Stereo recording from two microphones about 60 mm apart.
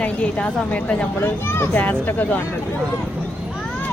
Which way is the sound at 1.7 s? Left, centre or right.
Left.